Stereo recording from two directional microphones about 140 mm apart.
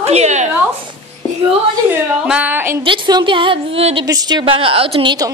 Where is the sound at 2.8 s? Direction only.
35° right (ahead or behind).